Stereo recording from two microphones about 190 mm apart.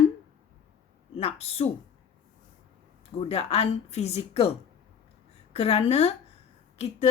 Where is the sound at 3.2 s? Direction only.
30° left (ahead or behind).